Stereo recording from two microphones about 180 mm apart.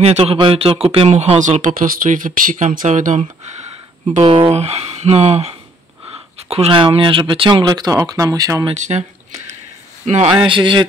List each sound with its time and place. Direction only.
0.0 s speech: 35° right (ahead or behind)
8.6 s speech: 40° right (ahead or behind)
10.3 s speech: 25° right (ahead or behind)